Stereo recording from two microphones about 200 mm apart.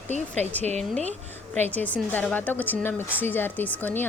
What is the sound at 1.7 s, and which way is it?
A woman's voice, 10° left (ahead or behind).